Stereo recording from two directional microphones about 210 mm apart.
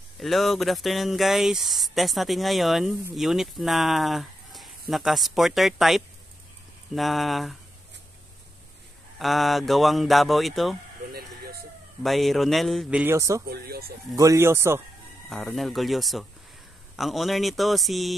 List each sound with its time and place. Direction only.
0.2 s speech: centre (ahead or behind)
9.2 s speech: centre (ahead or behind)
11.1 s vehicle: 45° right (ahead or behind)
12.0 s speech: centre (ahead or behind)
13.0 s speech: 15° right (ahead or behind)
13.5 s speech: 45° right (ahead or behind)
14.1 s speech: 15° right (ahead or behind)
15.2 s speech: centre (ahead or behind)